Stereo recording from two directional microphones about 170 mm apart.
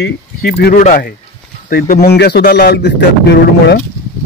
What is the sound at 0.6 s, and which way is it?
Speech, 70° left (ahead or behind).